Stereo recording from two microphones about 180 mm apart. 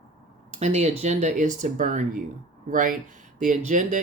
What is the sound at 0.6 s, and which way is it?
Speech, 40° right (ahead or behind).